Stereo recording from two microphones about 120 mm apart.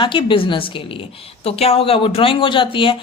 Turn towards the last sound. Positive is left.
turn(degrees=45)  # may be behind; listen again after turning